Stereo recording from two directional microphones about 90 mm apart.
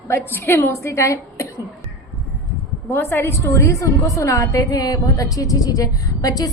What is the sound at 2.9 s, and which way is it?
A woman's voice, 30° left (ahead or behind).